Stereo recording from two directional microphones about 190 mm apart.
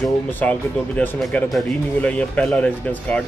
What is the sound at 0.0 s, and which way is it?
Speech, 10° left (ahead or behind).